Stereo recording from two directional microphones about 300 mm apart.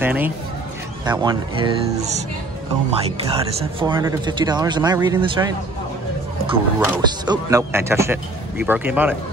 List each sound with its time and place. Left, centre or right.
0.0 s speech: centre